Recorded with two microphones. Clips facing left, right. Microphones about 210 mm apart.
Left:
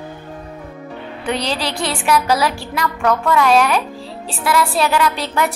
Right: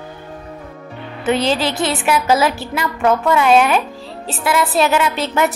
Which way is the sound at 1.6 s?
20° right (ahead or behind).